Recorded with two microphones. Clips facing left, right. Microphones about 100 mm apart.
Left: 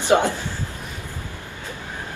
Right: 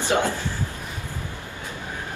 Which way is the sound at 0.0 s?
20° left (ahead or behind).